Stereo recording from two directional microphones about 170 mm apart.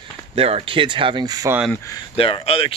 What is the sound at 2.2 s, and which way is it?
Speech, 35° left (ahead or behind).